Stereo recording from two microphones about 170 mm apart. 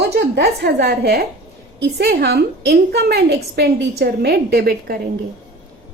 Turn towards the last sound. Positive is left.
turn(degrees=-65)  # may be behind; listen again after turning